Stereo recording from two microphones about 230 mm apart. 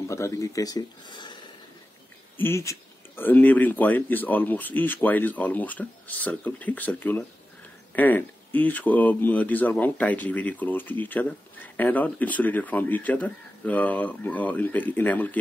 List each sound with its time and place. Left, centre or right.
0.1 s speech: centre